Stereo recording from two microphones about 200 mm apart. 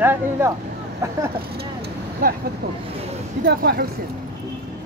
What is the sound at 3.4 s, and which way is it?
Speech, 50° right (ahead or behind).